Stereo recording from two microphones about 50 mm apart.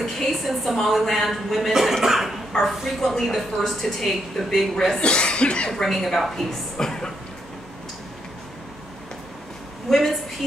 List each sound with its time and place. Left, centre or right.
0.0 s a woman's voice: centre
5.0 s speech: centre
5.7 s a woman's voice: centre
9.8 s a woman's voice: centre